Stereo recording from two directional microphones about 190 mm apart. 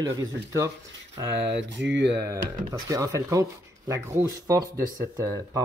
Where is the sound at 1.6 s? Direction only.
70° right (ahead or behind).